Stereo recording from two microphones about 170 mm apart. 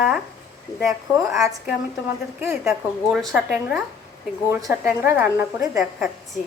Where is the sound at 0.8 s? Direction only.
Centre (ahead or behind).